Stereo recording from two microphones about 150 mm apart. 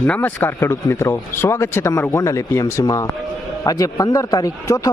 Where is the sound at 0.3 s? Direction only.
15° left (ahead or behind).